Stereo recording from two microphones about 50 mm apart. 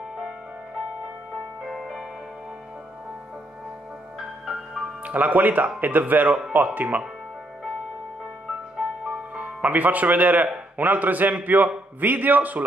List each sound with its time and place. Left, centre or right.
1.6 s music: centre
4.5 s music: centre
5.0 s speech: right
8.8 s music: centre
9.3 s speech: right